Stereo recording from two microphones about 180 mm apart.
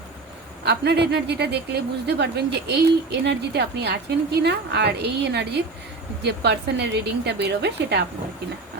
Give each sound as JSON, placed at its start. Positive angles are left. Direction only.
{"t": 0.6, "sound": "a woman's voice", "side_deg": -65}